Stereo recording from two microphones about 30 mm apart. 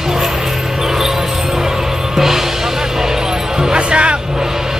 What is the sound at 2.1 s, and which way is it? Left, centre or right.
Music, centre.